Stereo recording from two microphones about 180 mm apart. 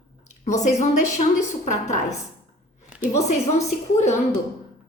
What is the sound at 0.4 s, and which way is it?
A woman's voice, 40° left (ahead or behind).